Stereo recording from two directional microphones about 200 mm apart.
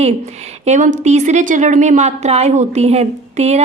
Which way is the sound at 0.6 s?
35° right (ahead or behind).